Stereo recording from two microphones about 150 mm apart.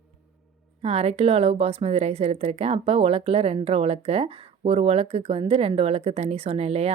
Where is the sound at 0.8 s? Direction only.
45° right (ahead or behind).